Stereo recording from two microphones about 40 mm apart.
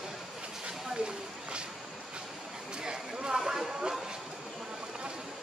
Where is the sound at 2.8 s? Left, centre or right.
Centre.